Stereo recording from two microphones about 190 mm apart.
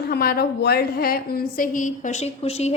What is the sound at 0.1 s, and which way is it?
A woman's voice, 55° left (ahead or behind).